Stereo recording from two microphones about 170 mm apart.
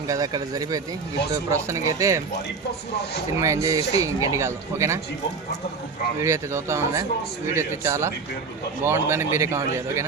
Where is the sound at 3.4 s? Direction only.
20° right (ahead or behind).